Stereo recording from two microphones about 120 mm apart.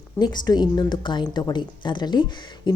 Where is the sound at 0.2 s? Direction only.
35° left (ahead or behind).